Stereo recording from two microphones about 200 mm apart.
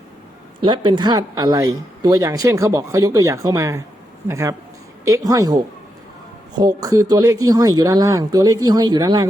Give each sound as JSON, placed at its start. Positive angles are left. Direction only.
{"t": 0.6, "sound": "speech", "side_deg": -25}